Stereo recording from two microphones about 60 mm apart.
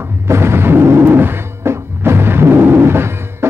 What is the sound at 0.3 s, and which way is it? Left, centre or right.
Music, right.